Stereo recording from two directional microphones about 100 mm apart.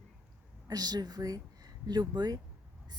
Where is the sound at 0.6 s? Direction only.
40° right (ahead or behind).